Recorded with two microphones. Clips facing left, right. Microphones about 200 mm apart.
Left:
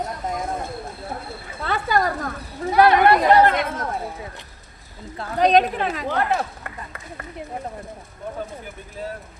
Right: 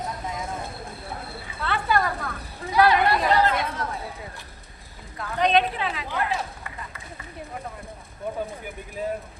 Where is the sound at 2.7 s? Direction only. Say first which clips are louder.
Left 5 dB; 55° left (ahead or behind).